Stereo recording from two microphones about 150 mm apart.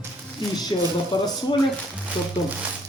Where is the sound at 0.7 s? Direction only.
30° left (ahead or behind).